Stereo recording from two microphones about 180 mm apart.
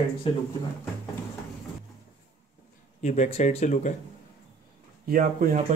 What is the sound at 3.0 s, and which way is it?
Speech, 40° left (ahead or behind).